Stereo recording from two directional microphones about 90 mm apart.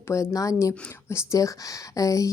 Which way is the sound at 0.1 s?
35° left (ahead or behind).